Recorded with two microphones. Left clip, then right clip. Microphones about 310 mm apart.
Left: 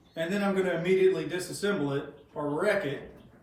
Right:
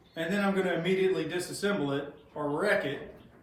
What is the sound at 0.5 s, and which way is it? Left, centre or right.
A man's voice, centre.